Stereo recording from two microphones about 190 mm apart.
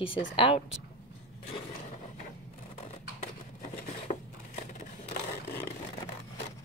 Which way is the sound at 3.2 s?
45° left (ahead or behind).